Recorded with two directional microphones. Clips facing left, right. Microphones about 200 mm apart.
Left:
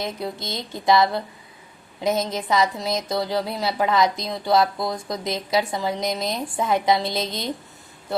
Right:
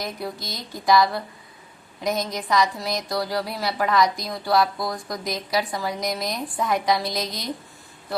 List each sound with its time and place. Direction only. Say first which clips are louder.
0.0 s a woman's voice: left 2 dB; 25° left (ahead or behind)